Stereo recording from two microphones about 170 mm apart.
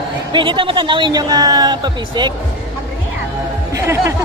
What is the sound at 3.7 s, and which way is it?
Music, 15° right (ahead or behind).